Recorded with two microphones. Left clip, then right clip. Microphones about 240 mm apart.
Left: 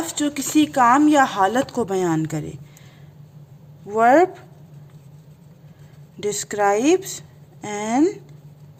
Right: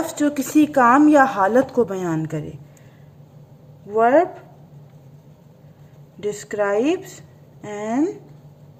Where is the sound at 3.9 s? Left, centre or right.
Left.